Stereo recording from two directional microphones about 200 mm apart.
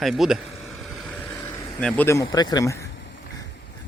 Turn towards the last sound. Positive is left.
turn(degrees=65)  # may be behind; listen again after turning